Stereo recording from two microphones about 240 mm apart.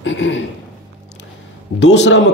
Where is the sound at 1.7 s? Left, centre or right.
Left.